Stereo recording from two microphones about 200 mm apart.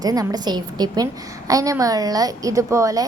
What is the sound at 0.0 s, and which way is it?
A woman's voice, 20° right (ahead or behind).